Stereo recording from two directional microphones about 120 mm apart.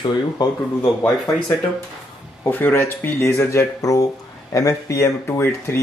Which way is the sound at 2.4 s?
15° left (ahead or behind).